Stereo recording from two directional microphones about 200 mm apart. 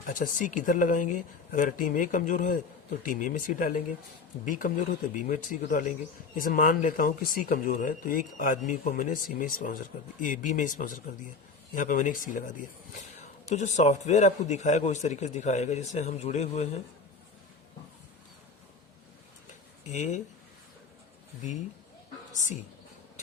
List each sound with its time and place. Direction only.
0.1 s a man's voice: 40° left (ahead or behind)
13.5 s a man's voice: 35° left (ahead or behind)
19.9 s a man's voice: 35° left (ahead or behind)